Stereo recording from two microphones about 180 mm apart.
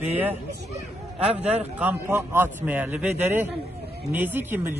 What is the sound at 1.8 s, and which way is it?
Speech, 10° right (ahead or behind).